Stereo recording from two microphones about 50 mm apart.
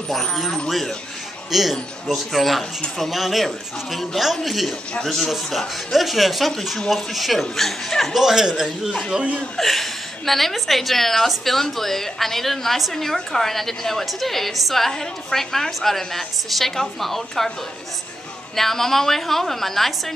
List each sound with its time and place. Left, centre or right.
0.1 s a woman's voice: centre
8.1 s a man's voice: centre
9.1 s speech: right
9.6 s a woman's voice: centre
18.6 s a woman's voice: centre